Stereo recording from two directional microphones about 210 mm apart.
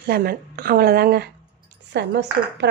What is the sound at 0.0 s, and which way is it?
Speech, 45° right (ahead or behind).